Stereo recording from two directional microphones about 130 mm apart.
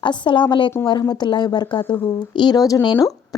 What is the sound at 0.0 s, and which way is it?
A woman's voice, 35° left (ahead or behind).